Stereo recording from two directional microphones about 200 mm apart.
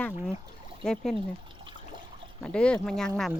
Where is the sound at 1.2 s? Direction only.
25° right (ahead or behind).